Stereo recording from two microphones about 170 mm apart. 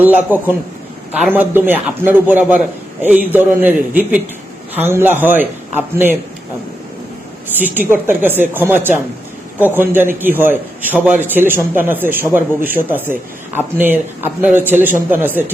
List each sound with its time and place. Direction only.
0.0 s a man's voice: 10° right (ahead or behind)
7.5 s a man's voice: 10° right (ahead or behind)